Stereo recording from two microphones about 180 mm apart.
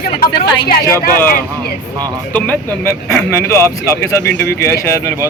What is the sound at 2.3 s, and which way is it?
Speech, 10° left (ahead or behind).